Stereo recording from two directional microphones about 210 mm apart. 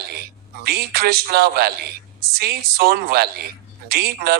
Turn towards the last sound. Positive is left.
turn(degrees=-50)  # may be behind; listen again after turning